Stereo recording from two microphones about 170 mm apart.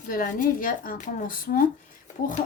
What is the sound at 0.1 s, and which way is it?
A woman's voice, 55° left (ahead or behind).